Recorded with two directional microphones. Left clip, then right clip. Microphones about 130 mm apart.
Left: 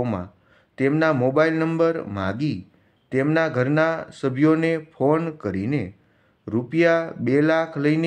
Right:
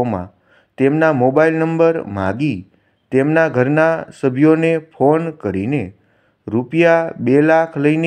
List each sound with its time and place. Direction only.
0.7 s a man's voice: 25° right (ahead or behind)